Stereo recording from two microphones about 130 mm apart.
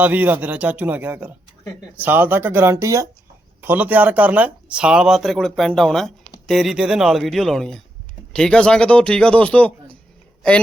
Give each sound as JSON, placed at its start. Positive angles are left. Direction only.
{"t": 0.0, "sound": "speech", "side_deg": -15}